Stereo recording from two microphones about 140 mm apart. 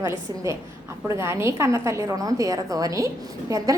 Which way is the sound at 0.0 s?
20° right (ahead or behind).